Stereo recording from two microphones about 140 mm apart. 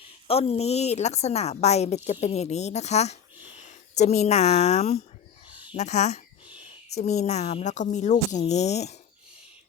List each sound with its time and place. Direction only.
0.3 s a woman's voice: 45° left (ahead or behind)